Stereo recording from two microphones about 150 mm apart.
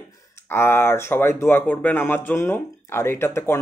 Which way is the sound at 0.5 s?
15° left (ahead or behind).